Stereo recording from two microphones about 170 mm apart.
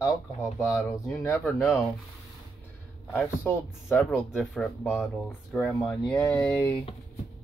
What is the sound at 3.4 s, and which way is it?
Speech, 10° left (ahead or behind).